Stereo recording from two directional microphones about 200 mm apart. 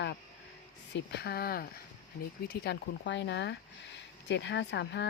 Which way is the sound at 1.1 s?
50° left (ahead or behind).